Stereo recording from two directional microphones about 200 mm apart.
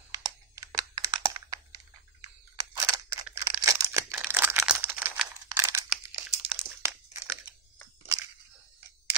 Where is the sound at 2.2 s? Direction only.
20° right (ahead or behind).